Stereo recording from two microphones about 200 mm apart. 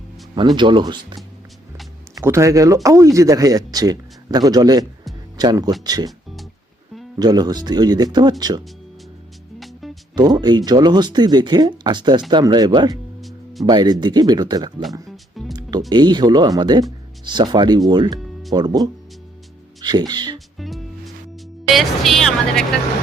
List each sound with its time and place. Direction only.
0.3 s speech: 25° right (ahead or behind)
6.1 s music: centre (ahead or behind)
7.2 s speech: 20° right (ahead or behind)
9.6 s music: centre (ahead or behind)
10.2 s speech: 20° right (ahead or behind)
13.2 s music: centre (ahead or behind)
13.7 s speech: 20° right (ahead or behind)
15.0 s music: centre (ahead or behind)
15.9 s speech: 20° right (ahead or behind)
19.8 s speech: 20° right (ahead or behind)
20.6 s music: centre (ahead or behind)
21.7 s a woman's voice: centre (ahead or behind)